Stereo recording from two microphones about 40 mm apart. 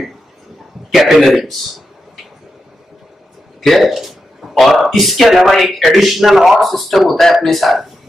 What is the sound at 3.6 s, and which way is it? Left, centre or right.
Speech, centre.